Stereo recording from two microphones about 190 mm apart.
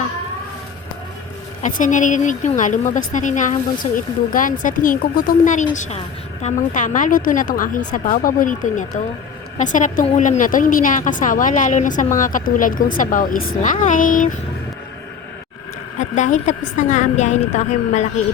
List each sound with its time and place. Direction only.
1.6 s a woman's voice: 40° left (ahead or behind)
16.0 s speech: 40° left (ahead or behind)